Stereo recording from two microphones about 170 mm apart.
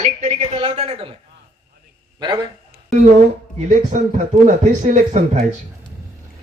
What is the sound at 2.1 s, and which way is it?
Speech, 25° right (ahead or behind).